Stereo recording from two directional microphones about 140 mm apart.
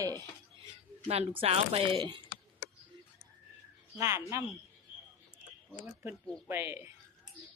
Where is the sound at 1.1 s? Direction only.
45° right (ahead or behind).